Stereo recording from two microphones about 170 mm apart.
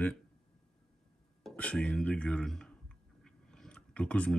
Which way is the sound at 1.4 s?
5° left (ahead or behind).